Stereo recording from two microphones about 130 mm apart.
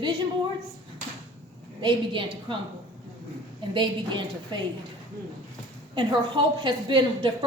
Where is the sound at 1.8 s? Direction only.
40° right (ahead or behind).